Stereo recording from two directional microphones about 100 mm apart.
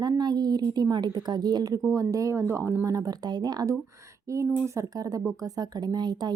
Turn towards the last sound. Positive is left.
turn(degrees=-45)  # may be behind; listen again after turning